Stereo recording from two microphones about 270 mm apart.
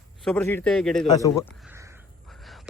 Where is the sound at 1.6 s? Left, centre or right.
Centre.